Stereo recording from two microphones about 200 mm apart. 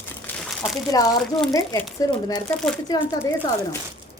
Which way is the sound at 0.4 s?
5° left (ahead or behind).